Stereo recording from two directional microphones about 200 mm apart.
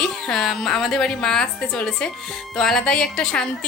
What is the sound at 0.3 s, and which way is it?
A woman's voice, 5° left (ahead or behind).